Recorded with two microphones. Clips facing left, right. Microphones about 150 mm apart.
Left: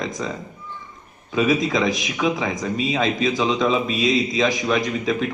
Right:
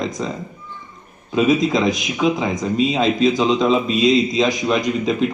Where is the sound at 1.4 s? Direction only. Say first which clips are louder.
Right 3 dB; 20° right (ahead or behind).